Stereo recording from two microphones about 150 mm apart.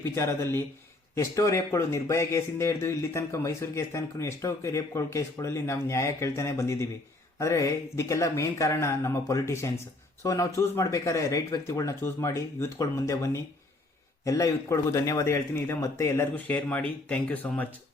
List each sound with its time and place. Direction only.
0.0 s speech: 20° left (ahead or behind)